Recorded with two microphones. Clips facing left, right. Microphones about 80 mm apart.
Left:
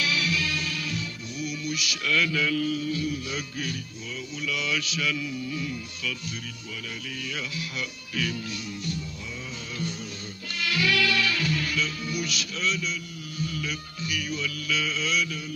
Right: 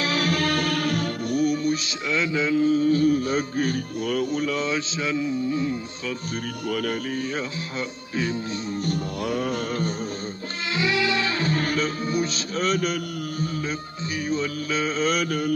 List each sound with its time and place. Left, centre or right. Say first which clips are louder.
0.0 s music: right 5 dB; right
6.7 s music: right 14 dB; right
8.8 s music: right 8 dB; right
10.7 s music: right 2 dB; right
13.6 s music: right 4 dB; right